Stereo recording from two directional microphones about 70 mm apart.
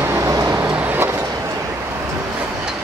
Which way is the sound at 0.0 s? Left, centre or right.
Right.